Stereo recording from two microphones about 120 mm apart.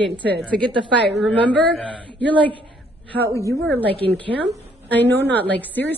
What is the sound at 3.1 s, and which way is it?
Speech, 25° left (ahead or behind).